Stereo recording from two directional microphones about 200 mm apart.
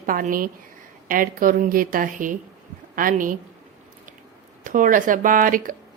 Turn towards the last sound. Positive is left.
turn(degrees=-45)  # may be behind; listen again after turning